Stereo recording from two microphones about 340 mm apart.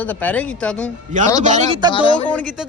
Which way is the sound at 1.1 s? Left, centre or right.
Right.